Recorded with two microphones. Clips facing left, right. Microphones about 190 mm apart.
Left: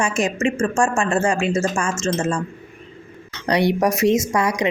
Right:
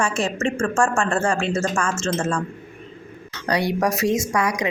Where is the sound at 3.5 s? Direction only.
20° left (ahead or behind).